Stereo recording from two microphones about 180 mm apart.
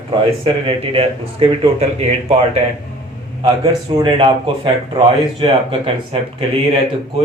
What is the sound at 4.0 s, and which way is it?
Speech, 30° right (ahead or behind).